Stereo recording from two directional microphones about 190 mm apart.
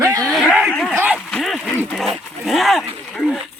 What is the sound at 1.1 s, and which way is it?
Speech, centre (ahead or behind).